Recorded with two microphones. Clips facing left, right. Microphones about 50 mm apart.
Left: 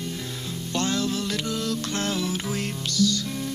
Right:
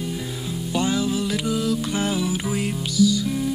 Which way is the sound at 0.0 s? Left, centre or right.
Centre.